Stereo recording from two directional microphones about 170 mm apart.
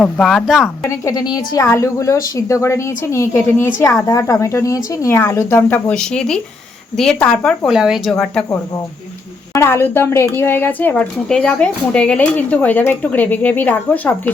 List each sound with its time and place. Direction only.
0.0 s speech: 5° left (ahead or behind)
0.8 s a woman's voice: 20° left (ahead or behind); by 8.1 s centre (ahead or behind)
9.5 s speech: 15° left (ahead or behind)